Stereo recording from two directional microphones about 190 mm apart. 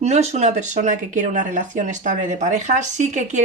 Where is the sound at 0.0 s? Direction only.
35° right (ahead or behind).